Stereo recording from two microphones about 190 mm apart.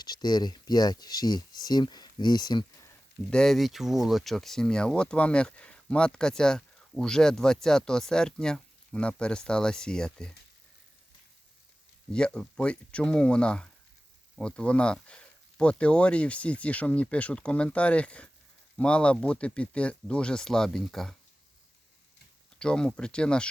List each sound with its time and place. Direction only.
0.0 s speech: 20° left (ahead or behind)
3.2 s speech: 5° left (ahead or behind)
12.1 s speech: 5° left (ahead or behind)
22.5 s speech: 5° left (ahead or behind)